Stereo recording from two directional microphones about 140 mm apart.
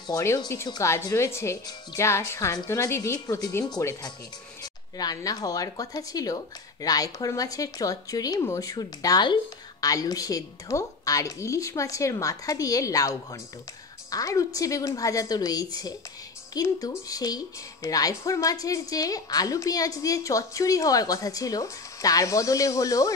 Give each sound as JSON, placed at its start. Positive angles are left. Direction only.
{"t": 0.2, "sound": "speech", "side_deg": 20}
{"t": 4.9, "sound": "speech", "side_deg": 25}